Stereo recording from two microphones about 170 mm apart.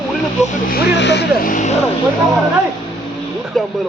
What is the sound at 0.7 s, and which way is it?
Speech, 75° left (ahead or behind).